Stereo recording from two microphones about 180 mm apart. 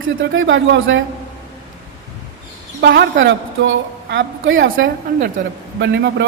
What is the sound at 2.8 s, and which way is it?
A woman's voice, 70° right (ahead or behind).